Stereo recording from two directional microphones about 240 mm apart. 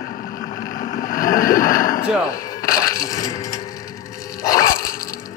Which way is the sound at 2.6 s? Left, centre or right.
Left.